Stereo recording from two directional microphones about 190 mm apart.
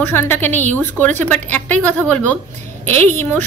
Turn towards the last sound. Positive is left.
turn(degrees=10)  # may be behind; listen again after turning